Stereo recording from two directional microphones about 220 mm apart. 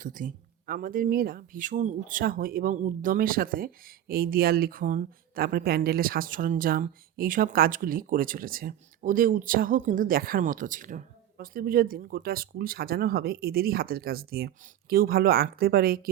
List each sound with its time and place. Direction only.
0.0 s speech: 40° right (ahead or behind)